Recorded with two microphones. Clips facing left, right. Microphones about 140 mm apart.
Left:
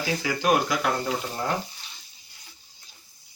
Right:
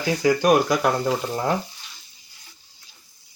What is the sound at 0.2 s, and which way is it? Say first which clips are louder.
Speech: right 7 dB; 40° right (ahead or behind).